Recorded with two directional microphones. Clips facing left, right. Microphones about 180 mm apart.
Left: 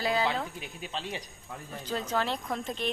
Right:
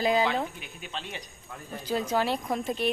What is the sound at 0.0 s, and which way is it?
Speech, 15° right (ahead or behind).